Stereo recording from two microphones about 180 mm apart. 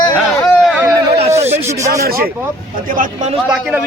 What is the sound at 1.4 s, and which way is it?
Snake, 35° right (ahead or behind).